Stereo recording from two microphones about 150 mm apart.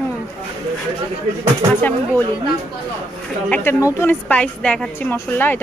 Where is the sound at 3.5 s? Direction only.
15° left (ahead or behind).